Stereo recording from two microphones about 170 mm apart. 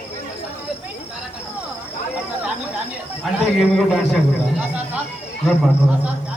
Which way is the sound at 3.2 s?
Centre (ahead or behind).